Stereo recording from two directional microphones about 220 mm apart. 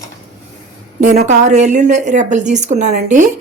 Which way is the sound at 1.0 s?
35° right (ahead or behind).